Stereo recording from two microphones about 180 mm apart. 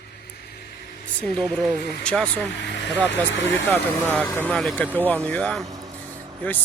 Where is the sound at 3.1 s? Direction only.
85° left.